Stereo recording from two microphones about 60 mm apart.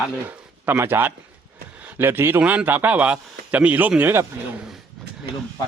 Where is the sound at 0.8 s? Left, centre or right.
Right.